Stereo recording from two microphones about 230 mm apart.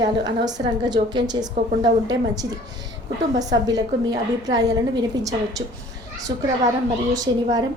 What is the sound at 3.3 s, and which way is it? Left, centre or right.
A woman's voice, centre.